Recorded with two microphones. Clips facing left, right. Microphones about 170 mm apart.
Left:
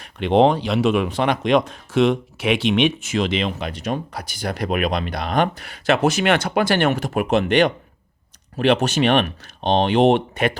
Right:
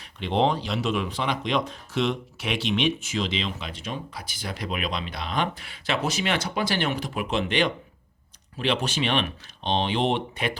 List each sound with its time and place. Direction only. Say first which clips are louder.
0.0 s speech: left 8 dB; 60° left (ahead or behind)